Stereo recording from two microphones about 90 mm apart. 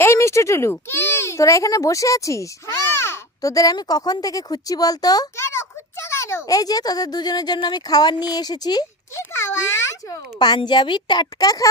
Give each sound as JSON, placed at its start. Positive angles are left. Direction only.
{"t": 0.0, "sound": "speech", "side_deg": 30}
{"t": 5.4, "sound": "a child's voice", "side_deg": 30}
{"t": 9.3, "sound": "a sound", "side_deg": 30}
{"t": 10.7, "sound": "a woman's voice", "side_deg": 60}